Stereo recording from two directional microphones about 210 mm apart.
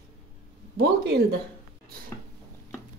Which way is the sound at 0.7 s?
50° right (ahead or behind).